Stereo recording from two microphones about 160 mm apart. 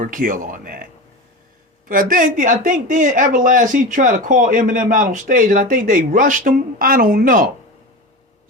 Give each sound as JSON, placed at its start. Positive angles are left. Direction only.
{"t": 0.0, "sound": "speech", "side_deg": -55}
{"t": 1.9, "sound": "speech", "side_deg": -60}